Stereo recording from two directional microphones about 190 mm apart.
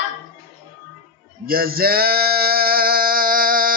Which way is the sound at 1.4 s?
50° right (ahead or behind).